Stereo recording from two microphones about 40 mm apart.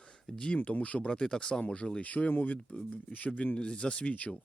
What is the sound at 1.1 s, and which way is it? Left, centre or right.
Speech, centre.